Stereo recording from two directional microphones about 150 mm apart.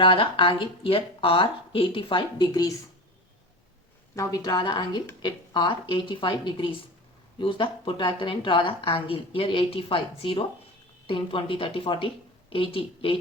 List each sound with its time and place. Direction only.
0.0 s a woman's voice: 35° left (ahead or behind)
4.1 s a woman's voice: 20° left (ahead or behind); by 13.1 s 35° left (ahead or behind)